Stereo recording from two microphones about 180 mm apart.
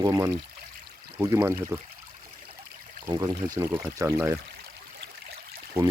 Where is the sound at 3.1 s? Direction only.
20° right (ahead or behind).